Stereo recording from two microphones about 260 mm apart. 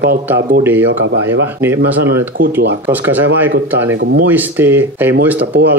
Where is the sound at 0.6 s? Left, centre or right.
Centre.